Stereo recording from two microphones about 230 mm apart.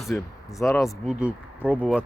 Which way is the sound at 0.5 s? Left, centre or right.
Centre.